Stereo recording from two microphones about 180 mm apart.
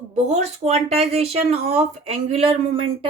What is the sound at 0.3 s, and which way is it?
Speech, 40° right (ahead or behind).